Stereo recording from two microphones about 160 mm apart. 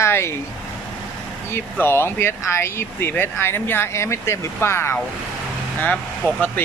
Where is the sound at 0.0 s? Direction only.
15° left (ahead or behind).